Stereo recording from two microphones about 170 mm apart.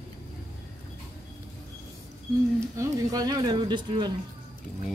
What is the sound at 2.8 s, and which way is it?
Speech, 20° right (ahead or behind).